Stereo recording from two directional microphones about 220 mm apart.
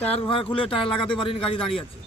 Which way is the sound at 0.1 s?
25° left (ahead or behind).